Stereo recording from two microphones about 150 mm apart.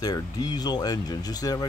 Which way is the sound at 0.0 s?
25° left (ahead or behind).